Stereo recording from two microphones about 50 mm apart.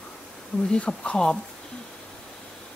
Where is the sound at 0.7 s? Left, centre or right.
Centre.